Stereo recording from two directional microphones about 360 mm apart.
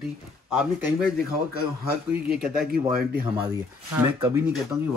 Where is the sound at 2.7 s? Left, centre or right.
Right.